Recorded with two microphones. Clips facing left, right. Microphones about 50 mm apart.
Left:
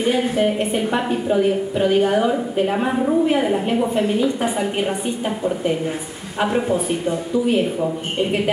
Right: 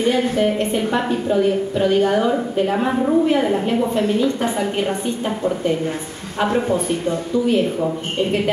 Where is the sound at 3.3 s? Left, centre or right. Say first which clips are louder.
Right 1 dB; left.